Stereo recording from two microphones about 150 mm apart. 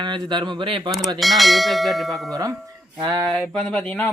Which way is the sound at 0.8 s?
Centre (ahead or behind).